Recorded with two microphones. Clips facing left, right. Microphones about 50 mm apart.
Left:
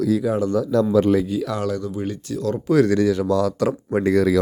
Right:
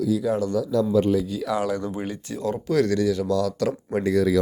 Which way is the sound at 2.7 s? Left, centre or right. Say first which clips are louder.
Left 5 dB; centre.